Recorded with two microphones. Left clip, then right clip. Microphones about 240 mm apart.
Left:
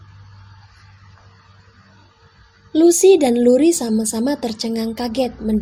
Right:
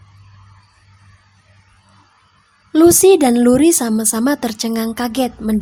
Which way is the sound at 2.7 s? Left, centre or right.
Right.